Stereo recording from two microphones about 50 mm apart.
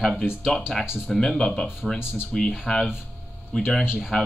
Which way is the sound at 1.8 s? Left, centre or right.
Centre.